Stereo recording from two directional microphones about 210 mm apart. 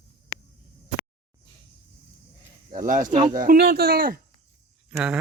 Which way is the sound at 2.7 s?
40° right (ahead or behind).